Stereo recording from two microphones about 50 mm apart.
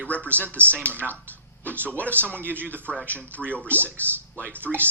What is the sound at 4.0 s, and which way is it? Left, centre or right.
Speech, left.